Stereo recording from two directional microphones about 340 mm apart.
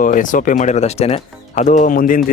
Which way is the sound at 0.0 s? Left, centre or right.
Left.